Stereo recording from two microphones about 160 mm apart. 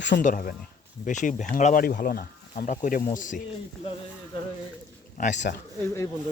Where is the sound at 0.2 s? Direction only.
55° left (ahead or behind).